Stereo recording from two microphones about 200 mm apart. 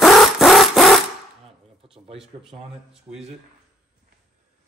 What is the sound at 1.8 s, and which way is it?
Speech, 30° right (ahead or behind).